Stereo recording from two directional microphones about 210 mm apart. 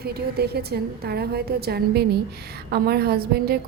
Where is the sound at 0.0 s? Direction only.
50° right (ahead or behind).